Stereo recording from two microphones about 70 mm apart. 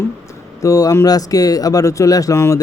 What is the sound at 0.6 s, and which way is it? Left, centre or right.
Speech, left.